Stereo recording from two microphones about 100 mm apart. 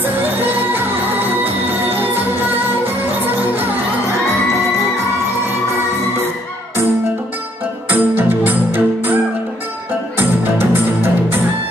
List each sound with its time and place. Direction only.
0.0 s music: 20° right (ahead or behind)
7.9 s music: 20° right (ahead or behind)
10.1 s music: 20° right (ahead or behind)